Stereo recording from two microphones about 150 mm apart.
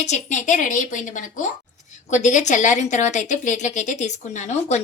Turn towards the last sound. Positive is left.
turn(degrees=50)  # may be behind; listen again after turning